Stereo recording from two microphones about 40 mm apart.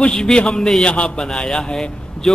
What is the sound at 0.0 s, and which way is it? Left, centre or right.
A man's voice, left.